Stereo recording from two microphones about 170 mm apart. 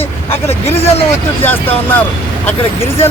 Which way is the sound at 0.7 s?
35° left (ahead or behind).